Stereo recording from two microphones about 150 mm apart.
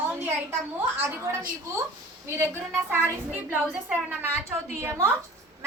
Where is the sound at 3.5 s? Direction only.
5° right (ahead or behind).